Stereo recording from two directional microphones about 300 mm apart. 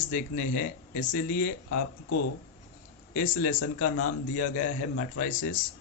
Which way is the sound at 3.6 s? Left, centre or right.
Left.